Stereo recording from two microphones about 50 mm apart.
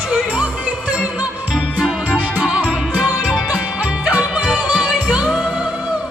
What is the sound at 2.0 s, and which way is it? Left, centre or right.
Music, right.